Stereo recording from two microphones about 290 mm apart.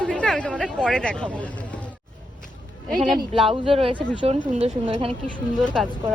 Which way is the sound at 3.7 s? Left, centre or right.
Centre.